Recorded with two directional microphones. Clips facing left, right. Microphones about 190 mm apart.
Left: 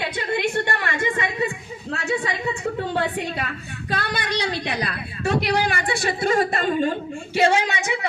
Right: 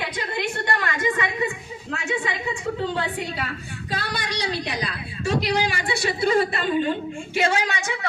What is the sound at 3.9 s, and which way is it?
A woman's voice, 60° left (ahead or behind).